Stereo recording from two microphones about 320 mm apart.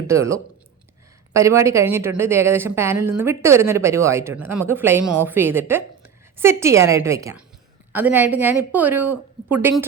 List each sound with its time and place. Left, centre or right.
0.1 s a woman's voice: centre